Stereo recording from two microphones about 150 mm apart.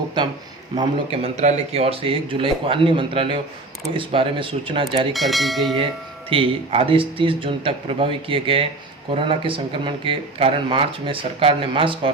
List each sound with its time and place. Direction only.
0.2 s a man's voice: 30° right (ahead or behind)
5.1 s speech: centre (ahead or behind)
6.3 s a man's voice: 40° right (ahead or behind)